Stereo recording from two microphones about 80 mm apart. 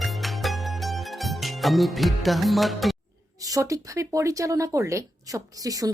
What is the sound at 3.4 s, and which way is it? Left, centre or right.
Speech, right.